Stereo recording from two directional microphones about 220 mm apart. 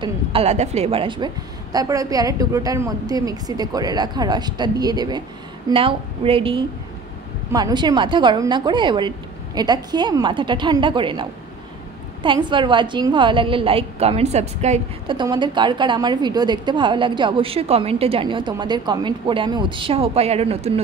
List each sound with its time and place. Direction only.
0.0 s a woman's voice: 25° right (ahead or behind)